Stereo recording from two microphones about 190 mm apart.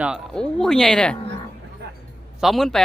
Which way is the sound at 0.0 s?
Centre (ahead or behind).